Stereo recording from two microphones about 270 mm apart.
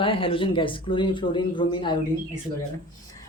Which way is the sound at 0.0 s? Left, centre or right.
Centre.